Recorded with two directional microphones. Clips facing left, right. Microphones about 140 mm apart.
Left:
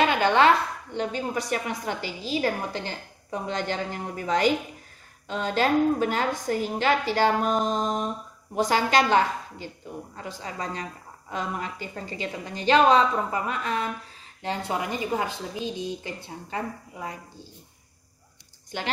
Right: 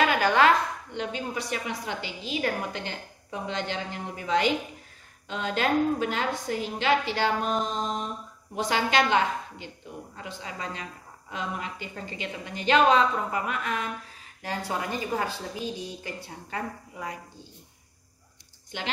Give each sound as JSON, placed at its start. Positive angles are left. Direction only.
{"t": 0.0, "sound": "a sound", "side_deg": 25}
{"t": 0.9, "sound": "a woman's voice", "side_deg": 40}
{"t": 18.7, "sound": "a woman's voice", "side_deg": 40}